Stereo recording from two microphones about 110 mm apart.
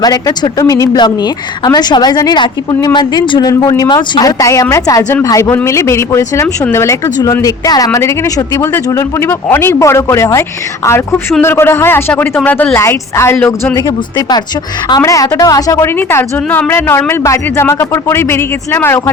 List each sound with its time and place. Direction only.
0.0 s a woman's voice: 35° left (ahead or behind)
0.9 s a woman's voice: 40° left (ahead or behind); by 13.5 s 20° left (ahead or behind)
13.8 s a woman's voice: 40° left (ahead or behind); by 19.1 s 20° left (ahead or behind)